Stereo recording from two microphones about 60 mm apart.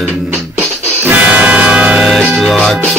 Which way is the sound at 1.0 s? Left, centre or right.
Right.